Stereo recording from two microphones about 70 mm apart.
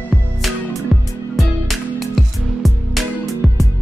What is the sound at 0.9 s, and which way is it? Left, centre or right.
Music, centre.